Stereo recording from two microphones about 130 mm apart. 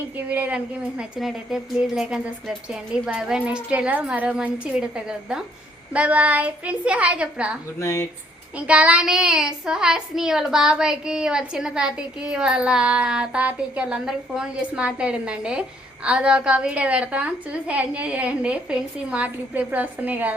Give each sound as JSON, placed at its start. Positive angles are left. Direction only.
{"t": 0.3, "sound": "speech", "side_deg": -10}
{"t": 7.8, "sound": "speech", "side_deg": 20}
{"t": 8.5, "sound": "speech", "side_deg": -10}